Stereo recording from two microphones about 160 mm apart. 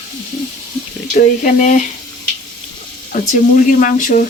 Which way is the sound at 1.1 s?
55° left (ahead or behind).